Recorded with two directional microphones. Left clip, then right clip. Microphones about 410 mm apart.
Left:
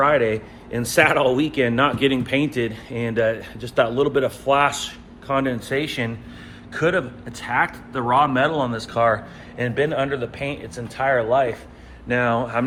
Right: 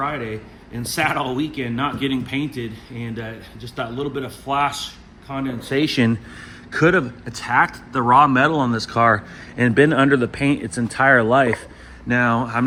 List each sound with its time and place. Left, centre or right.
0.0 s a man's voice: centre
5.7 s a man's voice: right